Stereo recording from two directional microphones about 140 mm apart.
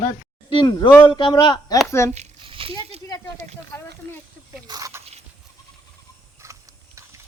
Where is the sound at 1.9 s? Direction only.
20° left (ahead or behind).